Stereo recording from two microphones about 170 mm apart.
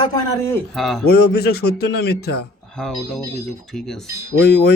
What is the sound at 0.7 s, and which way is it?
Speech, centre (ahead or behind).